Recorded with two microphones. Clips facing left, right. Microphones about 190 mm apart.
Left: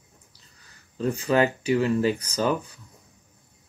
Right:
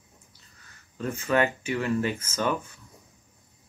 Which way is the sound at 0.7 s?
35° left (ahead or behind).